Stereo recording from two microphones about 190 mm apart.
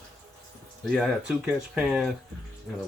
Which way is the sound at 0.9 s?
Centre (ahead or behind).